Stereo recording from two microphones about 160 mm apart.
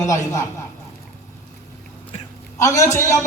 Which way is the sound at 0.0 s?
20° left (ahead or behind).